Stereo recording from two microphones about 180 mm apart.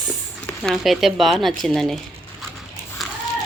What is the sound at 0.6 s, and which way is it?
Speech, centre (ahead or behind).